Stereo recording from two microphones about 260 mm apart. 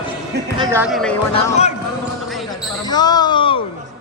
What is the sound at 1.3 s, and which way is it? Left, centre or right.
Speech, left.